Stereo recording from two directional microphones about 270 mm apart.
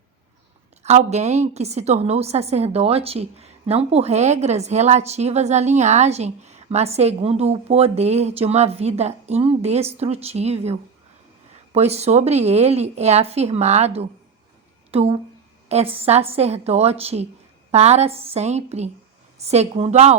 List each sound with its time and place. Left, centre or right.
0.8 s a woman's voice: right
14.8 s a sound: right
16.0 s a woman's voice: right